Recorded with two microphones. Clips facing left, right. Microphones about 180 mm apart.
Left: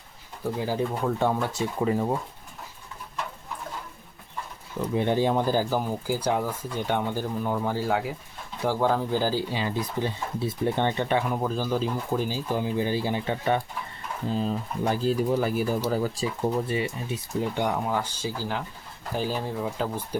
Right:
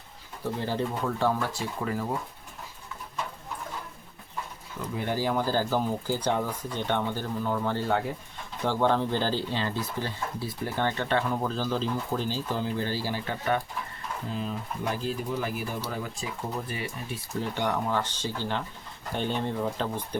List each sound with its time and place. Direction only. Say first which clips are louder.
0.4 s speech: left 2 dB; 10° left (ahead or behind)
4.9 s speech: left 5 dB; 25° left (ahead or behind)
14.3 s speech: left 7 dB; 35° left (ahead or behind)
16.6 s speech: left 6 dB; 25° left (ahead or behind); by 19.9 s 5° left (ahead or behind)